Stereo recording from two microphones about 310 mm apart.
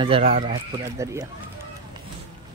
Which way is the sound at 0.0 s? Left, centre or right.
Centre.